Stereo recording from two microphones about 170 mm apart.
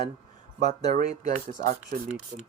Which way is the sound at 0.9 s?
45° right (ahead or behind).